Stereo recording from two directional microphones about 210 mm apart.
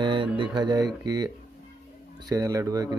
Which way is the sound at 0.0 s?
25° right (ahead or behind).